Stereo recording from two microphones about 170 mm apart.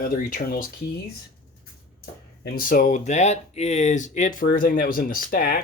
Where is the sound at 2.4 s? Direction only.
60° left (ahead or behind).